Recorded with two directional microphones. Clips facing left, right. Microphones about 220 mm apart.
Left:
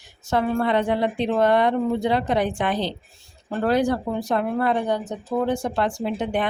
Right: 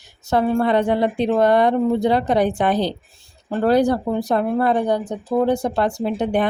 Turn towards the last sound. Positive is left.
turn(degrees=-40)  # may be behind; listen again after turning